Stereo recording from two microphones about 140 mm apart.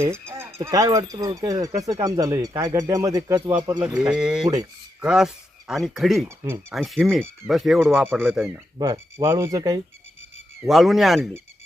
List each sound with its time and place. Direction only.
0.0 s speech: 20° right (ahead or behind)
3.6 s speech: 35° right (ahead or behind)
3.8 s speech: 5° right (ahead or behind)
4.4 s speech: 25° right (ahead or behind)
4.9 s speech: 5° right (ahead or behind)
6.2 s speech: 15° right (ahead or behind)
6.7 s speech: centre (ahead or behind)
8.9 s speech: 20° right (ahead or behind)
10.7 s speech: centre (ahead or behind)